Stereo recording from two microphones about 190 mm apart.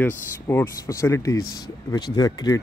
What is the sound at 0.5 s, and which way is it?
Speech, 15° left (ahead or behind).